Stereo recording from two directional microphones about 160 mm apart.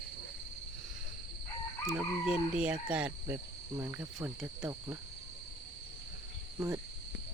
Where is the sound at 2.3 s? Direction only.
5° right (ahead or behind).